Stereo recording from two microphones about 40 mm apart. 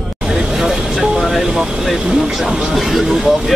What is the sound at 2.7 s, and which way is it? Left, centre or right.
Speech, centre.